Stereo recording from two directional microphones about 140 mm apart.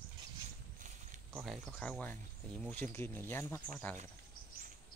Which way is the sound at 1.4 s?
Centre (ahead or behind).